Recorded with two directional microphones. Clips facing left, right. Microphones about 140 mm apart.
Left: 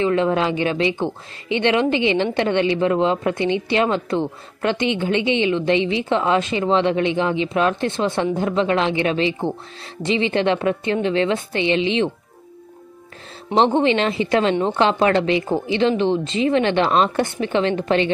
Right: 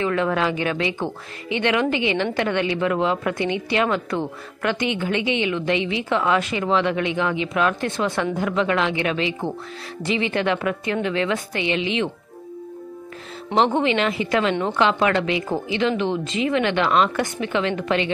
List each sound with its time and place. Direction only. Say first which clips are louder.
0.0 s a woman's voice: left 3 dB; 25° left (ahead or behind)
13.6 s a woman's voice: left 3 dB; 30° left (ahead or behind)